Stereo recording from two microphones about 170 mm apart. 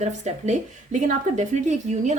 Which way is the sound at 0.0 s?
40° right (ahead or behind).